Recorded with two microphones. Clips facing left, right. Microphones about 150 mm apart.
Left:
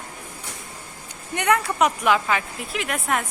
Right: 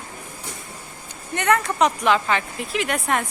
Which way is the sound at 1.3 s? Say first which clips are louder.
Right 1 dB; 15° left (ahead or behind).